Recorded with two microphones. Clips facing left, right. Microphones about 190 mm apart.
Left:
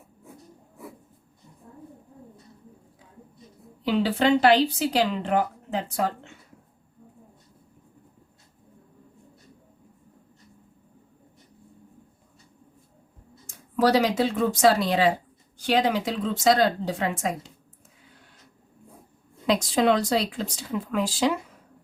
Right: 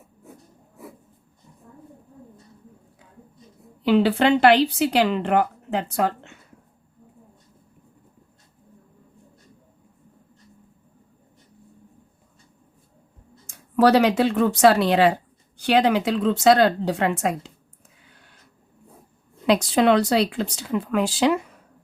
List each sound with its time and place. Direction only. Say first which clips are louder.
3.8 s speech: right 4 dB; 65° right (ahead or behind)
13.5 s a woman's voice: right 4 dB; 65° right (ahead or behind)
19.5 s speech: right 4 dB; 70° right (ahead or behind)